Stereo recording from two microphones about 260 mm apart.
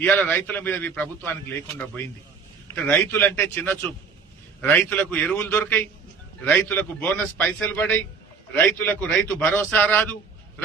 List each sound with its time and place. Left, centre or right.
0.0 s a man's voice: centre
2.6 s a man's voice: centre